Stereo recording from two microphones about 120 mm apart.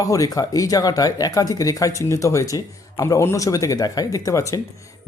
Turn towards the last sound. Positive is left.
turn(degrees=25)  # may be behind; listen again after turning